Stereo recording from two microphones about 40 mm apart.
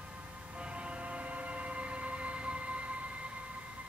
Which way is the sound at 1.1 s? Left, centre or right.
Right.